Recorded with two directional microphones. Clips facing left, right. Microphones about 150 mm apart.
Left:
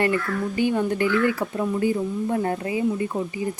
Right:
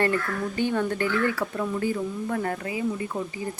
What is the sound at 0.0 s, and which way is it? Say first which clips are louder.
Speech: left 2 dB; 10° left (ahead or behind).